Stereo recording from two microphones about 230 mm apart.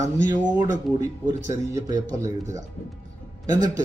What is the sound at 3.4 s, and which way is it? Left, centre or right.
Speech, centre.